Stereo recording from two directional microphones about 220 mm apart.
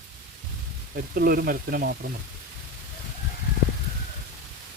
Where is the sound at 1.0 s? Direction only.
40° right (ahead or behind).